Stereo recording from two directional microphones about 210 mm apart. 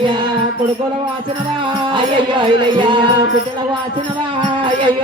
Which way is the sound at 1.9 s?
20° right (ahead or behind).